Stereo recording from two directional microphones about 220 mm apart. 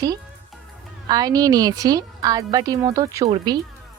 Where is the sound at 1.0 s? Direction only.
15° right (ahead or behind).